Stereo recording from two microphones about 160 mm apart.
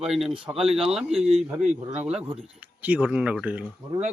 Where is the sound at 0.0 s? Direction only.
5° right (ahead or behind).